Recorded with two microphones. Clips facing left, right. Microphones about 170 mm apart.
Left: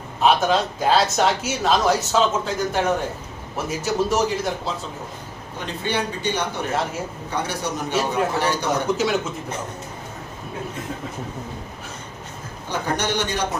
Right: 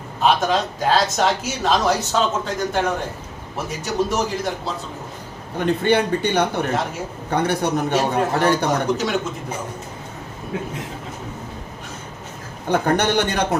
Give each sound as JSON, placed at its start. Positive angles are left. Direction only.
{"t": 0.2, "sound": "speech", "side_deg": 0}
{"t": 3.8, "sound": "speech", "side_deg": 0}
{"t": 5.5, "sound": "a man's voice", "side_deg": -55}
{"t": 9.0, "sound": "speech", "side_deg": 0}
{"t": 12.6, "sound": "a man's voice", "side_deg": -55}